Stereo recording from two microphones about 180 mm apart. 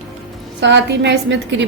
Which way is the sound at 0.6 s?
75° right (ahead or behind).